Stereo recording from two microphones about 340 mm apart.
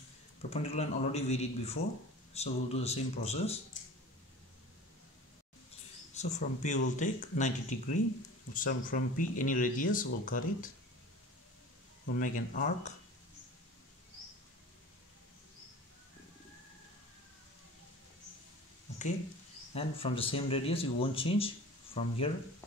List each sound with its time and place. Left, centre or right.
0.5 s speech: centre
6.1 s speech: left
12.1 s speech: left
19.7 s speech: centre